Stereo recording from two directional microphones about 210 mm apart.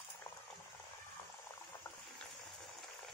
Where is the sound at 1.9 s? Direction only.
10° left (ahead or behind).